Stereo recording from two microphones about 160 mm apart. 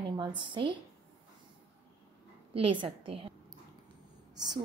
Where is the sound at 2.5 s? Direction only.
35° right (ahead or behind).